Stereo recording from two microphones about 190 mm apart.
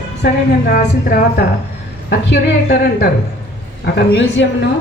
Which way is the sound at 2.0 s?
60° left (ahead or behind).